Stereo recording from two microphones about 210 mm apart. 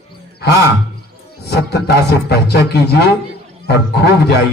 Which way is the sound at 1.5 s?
50° left (ahead or behind).